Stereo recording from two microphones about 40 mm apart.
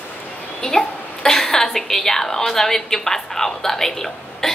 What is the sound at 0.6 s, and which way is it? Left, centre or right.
A woman's voice, centre.